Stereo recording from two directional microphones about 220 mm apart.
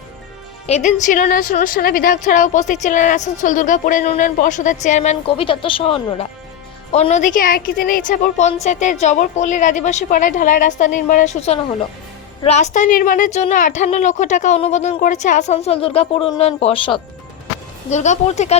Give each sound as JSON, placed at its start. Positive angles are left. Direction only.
{"t": 0.7, "sound": "a woman's voice", "side_deg": 35}